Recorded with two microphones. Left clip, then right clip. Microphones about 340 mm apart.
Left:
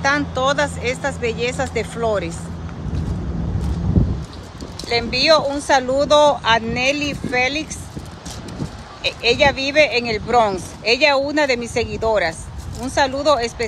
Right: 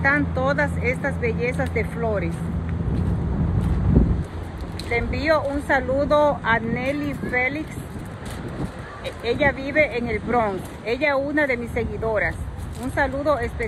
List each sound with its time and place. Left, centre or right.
0.0 s speech: centre
4.8 s speech: centre
9.0 s speech: left